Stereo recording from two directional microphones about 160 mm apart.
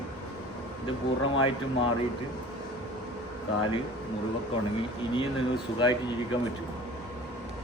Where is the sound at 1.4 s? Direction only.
35° left (ahead or behind).